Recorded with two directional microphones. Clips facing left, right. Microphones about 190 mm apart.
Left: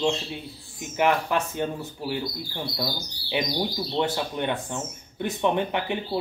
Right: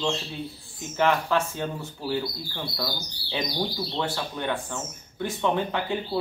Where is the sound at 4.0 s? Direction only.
20° left (ahead or behind).